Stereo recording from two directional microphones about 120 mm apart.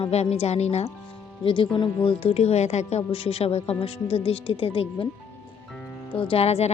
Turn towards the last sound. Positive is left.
turn(degrees=60)  # may be behind; listen again after turning